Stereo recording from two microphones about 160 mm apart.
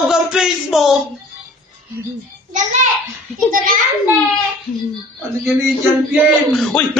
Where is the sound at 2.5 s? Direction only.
50° right (ahead or behind).